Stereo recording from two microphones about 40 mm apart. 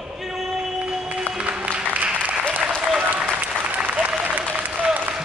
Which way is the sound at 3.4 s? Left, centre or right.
Right.